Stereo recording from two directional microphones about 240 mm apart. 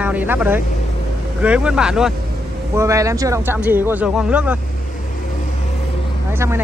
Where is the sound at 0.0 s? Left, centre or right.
Centre.